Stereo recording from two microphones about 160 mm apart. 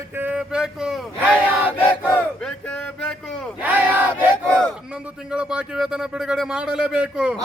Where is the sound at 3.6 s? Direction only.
10° right (ahead or behind).